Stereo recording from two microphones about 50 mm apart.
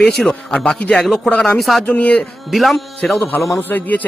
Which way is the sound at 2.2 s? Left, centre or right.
Centre.